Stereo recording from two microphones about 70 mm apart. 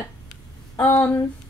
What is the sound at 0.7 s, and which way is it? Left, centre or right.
Speech, left.